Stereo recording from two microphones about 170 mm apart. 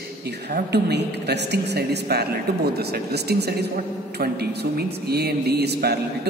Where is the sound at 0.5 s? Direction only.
75° right (ahead or behind).